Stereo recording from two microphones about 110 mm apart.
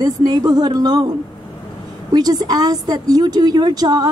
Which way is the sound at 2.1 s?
40° right (ahead or behind).